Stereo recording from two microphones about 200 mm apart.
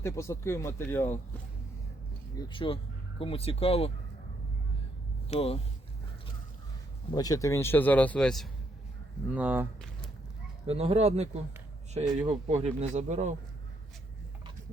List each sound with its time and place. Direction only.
0.0 s a man's voice: 15° left (ahead or behind)
2.4 s speech: 25° left (ahead or behind)
5.3 s speech: 30° left (ahead or behind)
7.1 s a man's voice: 20° left (ahead or behind); by 8.4 s 5° left (ahead or behind)
9.3 s speech: 10° right (ahead or behind)
10.7 s speech: 30° right (ahead or behind)